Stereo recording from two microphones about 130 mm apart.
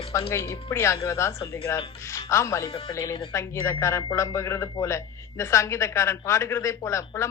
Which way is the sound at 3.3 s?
20° left (ahead or behind).